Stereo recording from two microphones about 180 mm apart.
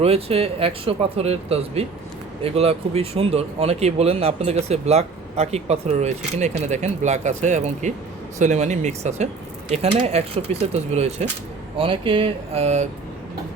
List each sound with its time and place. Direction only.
0.0 s speech: 35° right (ahead or behind)